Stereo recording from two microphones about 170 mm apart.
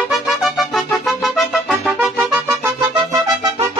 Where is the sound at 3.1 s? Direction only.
20° right (ahead or behind).